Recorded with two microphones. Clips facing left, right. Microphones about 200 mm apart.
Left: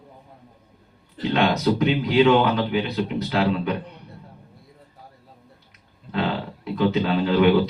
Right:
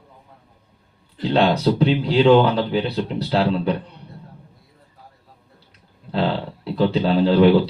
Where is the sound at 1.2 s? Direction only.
30° right (ahead or behind).